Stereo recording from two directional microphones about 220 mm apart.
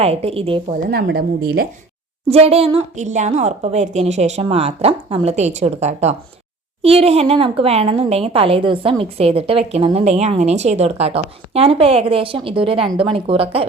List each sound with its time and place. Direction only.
0.0 s a woman's voice: 25° right (ahead or behind)
0.7 s speech: 45° right (ahead or behind)
2.3 s a woman's voice: 25° right (ahead or behind)